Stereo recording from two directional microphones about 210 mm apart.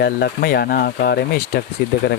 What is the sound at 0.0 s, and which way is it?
Speech, 50° left (ahead or behind).